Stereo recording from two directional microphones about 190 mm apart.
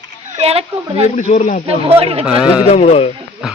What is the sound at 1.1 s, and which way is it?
Speech, 40° left (ahead or behind).